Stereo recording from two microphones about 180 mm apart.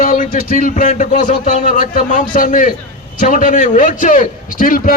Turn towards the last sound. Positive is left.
turn(degrees=50)  # may be behind; listen again after turning